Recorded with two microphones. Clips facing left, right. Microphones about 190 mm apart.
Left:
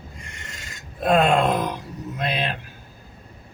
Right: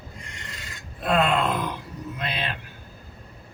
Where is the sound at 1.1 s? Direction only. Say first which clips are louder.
Left 4 dB; 45° left (ahead or behind).